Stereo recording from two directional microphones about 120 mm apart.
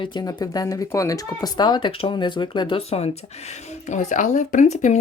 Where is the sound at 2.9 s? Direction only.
65° left (ahead or behind).